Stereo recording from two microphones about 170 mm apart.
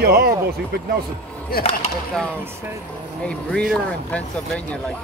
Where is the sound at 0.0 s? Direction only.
70° right (ahead or behind).